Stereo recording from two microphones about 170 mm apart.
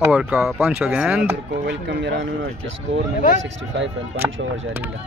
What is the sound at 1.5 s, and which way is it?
Speech, 90° right.